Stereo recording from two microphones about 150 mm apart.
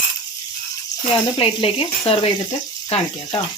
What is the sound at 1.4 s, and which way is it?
Speech, 40° left (ahead or behind).